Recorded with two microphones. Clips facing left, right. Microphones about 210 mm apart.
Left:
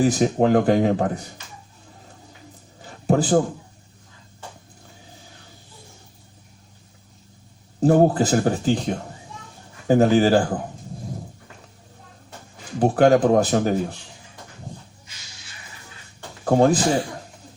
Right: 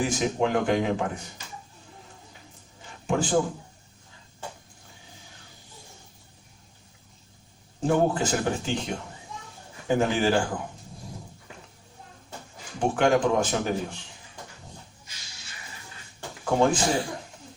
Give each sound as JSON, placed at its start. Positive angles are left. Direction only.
{"t": 0.0, "sound": "speech", "side_deg": 40}
{"t": 2.8, "sound": "a sound", "side_deg": 40}
{"t": 7.8, "sound": "speech", "side_deg": 40}
{"t": 12.8, "sound": "speech", "side_deg": 40}
{"t": 16.4, "sound": "speech", "side_deg": 40}